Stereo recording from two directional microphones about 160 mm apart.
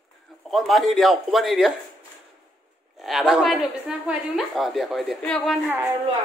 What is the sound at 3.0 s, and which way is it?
A woman's voice, centre (ahead or behind).